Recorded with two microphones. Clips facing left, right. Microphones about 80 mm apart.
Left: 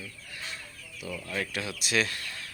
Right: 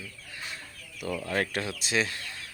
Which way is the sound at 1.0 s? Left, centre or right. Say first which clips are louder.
Right 5 dB; right.